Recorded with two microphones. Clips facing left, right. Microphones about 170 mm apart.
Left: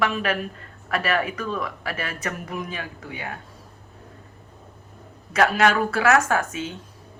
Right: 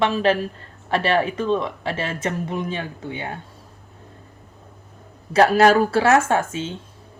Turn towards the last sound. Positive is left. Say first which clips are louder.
# right 3 dB
turn(degrees=-25)  # may be behind; listen again after turning